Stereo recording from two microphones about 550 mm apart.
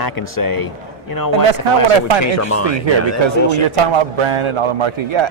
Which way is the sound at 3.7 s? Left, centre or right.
Right.